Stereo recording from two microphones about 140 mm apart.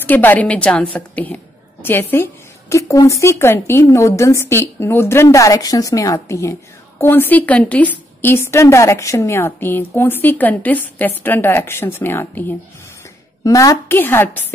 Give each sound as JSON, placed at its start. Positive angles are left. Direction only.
{"t": 0.0, "sound": "a woman's voice", "side_deg": 15}